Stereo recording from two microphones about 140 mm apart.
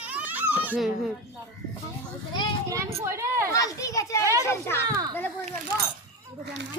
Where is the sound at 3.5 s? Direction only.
25° left (ahead or behind).